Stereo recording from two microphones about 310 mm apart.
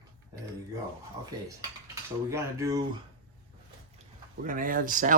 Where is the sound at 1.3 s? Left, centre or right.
Centre.